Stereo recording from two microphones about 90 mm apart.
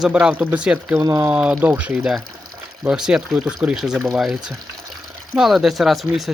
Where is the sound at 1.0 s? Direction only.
35° right (ahead or behind).